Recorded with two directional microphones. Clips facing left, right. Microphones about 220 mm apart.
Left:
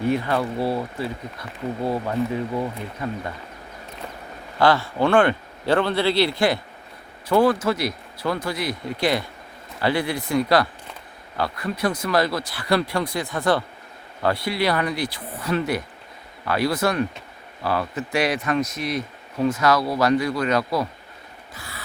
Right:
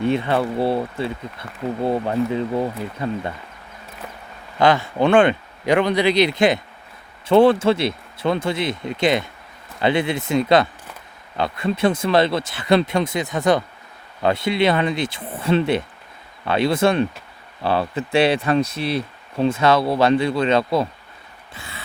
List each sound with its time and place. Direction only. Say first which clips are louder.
0.0 s speech: right 2 dB; 25° right (ahead or behind)
4.6 s speech: right 2 dB; 20° right (ahead or behind)
21.5 s a sound: right 2 dB; 25° right (ahead or behind)